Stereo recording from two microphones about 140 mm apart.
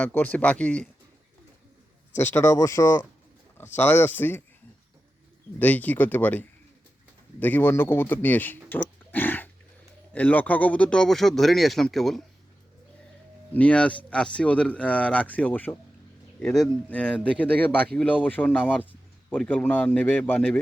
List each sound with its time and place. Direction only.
0.0 s speech: 10° left (ahead or behind)
2.1 s speech: 15° left (ahead or behind)
5.5 s speech: 10° left (ahead or behind)
13.5 s speech: 10° left (ahead or behind)